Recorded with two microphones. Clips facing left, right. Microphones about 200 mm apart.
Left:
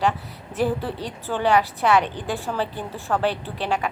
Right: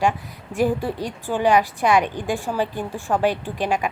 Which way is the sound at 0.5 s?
15° right (ahead or behind).